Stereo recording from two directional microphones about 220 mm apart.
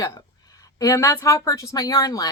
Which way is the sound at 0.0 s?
15° left (ahead or behind).